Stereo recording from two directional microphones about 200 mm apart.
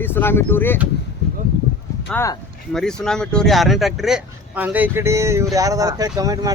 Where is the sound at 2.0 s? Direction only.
10° left (ahead or behind).